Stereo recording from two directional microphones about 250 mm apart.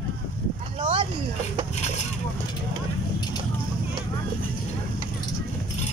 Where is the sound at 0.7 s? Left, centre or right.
Centre.